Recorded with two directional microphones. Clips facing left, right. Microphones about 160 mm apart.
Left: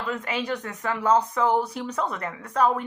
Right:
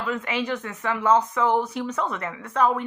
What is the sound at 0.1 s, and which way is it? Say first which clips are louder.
Speech: right 1 dB; 35° left (ahead or behind).